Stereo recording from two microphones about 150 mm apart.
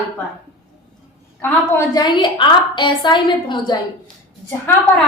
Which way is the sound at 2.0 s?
30° left (ahead or behind).